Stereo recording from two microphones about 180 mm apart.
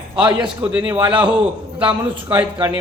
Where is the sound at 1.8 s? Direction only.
30° right (ahead or behind).